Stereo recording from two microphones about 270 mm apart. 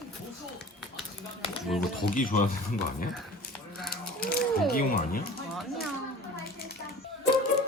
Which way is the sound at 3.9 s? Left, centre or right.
Left.